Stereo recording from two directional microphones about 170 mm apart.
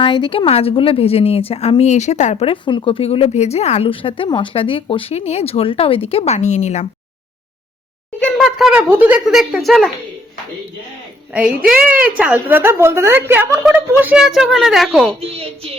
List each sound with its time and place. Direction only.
0.0 s a woman's voice: 30° left (ahead or behind)
8.2 s speech: centre (ahead or behind)
11.3 s a woman's voice: 5° right (ahead or behind)
15.2 s a woman's voice: 35° right (ahead or behind)